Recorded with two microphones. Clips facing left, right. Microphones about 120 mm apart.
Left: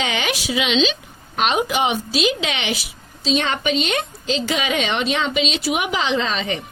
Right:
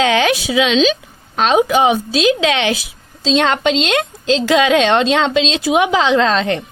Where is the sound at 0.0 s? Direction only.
90° right.